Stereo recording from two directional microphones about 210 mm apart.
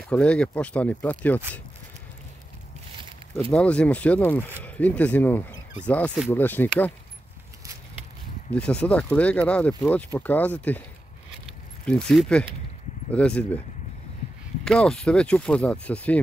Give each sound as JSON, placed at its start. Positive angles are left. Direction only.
{"t": 0.0, "sound": "speech", "side_deg": 5}
{"t": 3.5, "sound": "speech", "side_deg": 5}
{"t": 8.5, "sound": "speech", "side_deg": 5}
{"t": 11.8, "sound": "speech", "side_deg": 5}
{"t": 14.6, "sound": "speech", "side_deg": 5}